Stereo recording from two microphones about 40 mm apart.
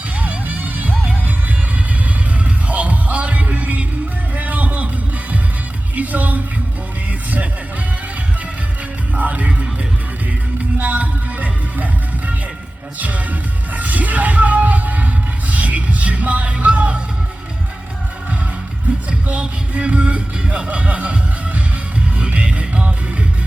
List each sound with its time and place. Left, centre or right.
0.2 s music: right
2.4 s music: right
6.0 s music: right
9.1 s music: right
10.8 s music: right
13.0 s music: right
18.9 s music: right